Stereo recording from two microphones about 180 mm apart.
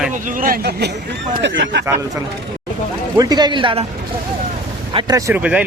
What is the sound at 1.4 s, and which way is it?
Speech, 75° right (ahead or behind).